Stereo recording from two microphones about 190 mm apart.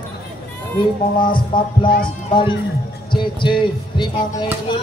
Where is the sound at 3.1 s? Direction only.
25° left (ahead or behind).